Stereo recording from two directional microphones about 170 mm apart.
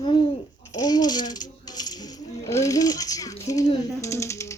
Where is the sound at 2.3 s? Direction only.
20° left (ahead or behind).